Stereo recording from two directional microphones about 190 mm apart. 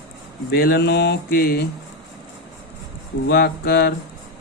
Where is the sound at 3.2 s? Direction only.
55° left (ahead or behind).